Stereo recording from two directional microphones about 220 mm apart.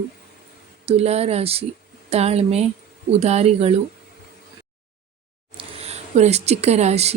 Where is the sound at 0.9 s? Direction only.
30° right (ahead or behind).